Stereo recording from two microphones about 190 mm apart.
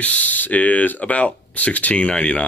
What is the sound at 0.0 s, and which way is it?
Speech, 5° left (ahead or behind).